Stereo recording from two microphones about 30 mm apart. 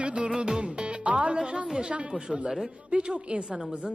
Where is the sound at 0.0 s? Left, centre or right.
Right.